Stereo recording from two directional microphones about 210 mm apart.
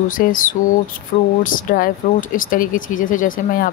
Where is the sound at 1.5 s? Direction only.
40° left (ahead or behind).